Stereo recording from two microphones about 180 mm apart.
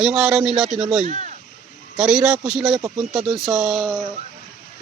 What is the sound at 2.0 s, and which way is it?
Speech, 5° right (ahead or behind).